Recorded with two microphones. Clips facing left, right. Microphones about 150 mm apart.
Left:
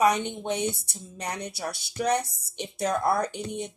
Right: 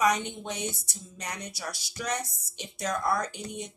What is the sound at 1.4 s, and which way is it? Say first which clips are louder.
Speech: left 5 dB; 55° left (ahead or behind).